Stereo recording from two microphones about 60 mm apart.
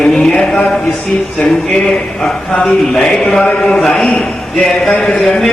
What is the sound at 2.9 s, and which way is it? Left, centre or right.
A man's voice, centre.